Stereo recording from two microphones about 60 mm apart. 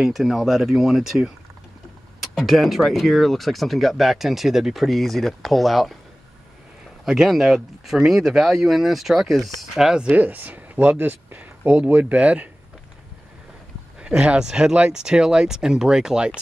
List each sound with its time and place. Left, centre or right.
0.0 s speech: centre
7.1 s speech: centre
10.1 s speech: right
13.9 s speech: centre